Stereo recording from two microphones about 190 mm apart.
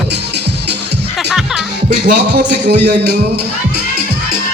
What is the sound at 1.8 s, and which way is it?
Speech, 45° right (ahead or behind).